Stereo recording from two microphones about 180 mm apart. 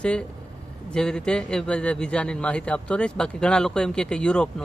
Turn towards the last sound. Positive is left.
turn(degrees=5)  # may be behind; listen again after turning